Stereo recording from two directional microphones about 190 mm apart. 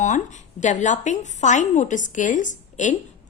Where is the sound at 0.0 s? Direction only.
40° left (ahead or behind).